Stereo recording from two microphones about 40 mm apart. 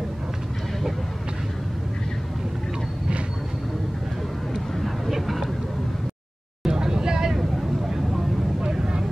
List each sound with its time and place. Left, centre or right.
4.7 s vehicle: centre
6.6 s vehicle: centre
8.6 s vehicle: right